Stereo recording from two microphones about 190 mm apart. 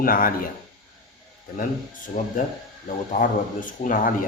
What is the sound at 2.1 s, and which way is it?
Speech, 45° left (ahead or behind).